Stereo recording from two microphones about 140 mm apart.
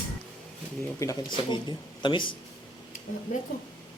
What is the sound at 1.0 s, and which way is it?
Speech, 20° left (ahead or behind).